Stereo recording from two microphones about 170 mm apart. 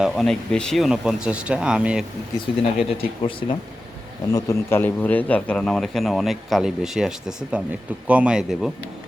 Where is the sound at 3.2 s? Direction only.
30° left (ahead or behind).